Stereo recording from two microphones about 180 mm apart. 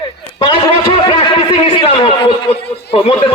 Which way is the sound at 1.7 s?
30° left (ahead or behind).